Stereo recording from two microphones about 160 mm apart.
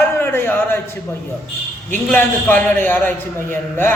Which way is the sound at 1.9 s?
10° left (ahead or behind).